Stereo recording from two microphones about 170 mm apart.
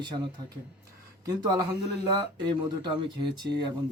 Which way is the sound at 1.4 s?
25° right (ahead or behind).